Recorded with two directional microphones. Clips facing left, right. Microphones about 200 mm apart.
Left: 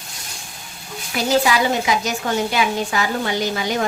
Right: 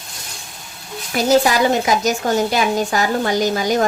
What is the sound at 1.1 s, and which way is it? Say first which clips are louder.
Speech: right 3 dB; 45° right (ahead or behind).